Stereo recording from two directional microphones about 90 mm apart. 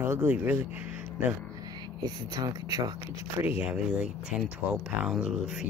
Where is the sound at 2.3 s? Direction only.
45° right (ahead or behind).